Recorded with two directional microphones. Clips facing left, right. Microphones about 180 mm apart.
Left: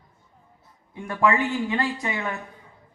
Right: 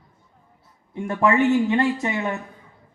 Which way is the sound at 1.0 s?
25° right (ahead or behind).